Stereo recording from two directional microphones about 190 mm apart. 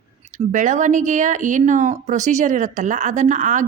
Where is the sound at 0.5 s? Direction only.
40° right (ahead or behind).